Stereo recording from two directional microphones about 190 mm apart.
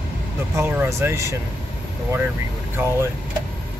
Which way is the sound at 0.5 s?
10° right (ahead or behind).